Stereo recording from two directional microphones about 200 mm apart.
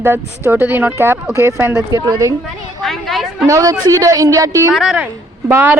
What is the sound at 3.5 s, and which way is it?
Speech, 15° right (ahead or behind).